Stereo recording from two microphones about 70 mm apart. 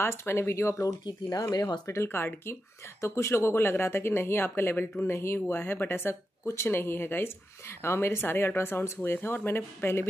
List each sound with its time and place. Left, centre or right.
0.0 s speech: left
1.5 s speech: left
2.0 s speech: left